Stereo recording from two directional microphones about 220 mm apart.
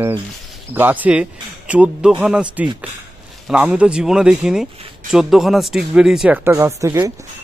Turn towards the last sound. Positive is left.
turn(degrees=-15)  # may be behind; listen again after turning